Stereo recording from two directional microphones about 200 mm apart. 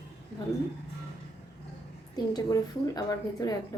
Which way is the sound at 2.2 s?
20° left (ahead or behind).